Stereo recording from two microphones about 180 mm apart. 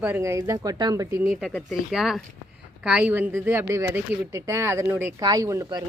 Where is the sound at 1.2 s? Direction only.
5° right (ahead or behind).